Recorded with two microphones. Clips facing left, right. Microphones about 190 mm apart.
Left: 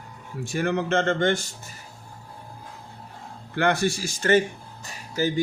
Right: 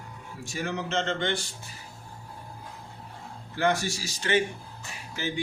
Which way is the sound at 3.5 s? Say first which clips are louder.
Left 4 dB; 60° left (ahead or behind).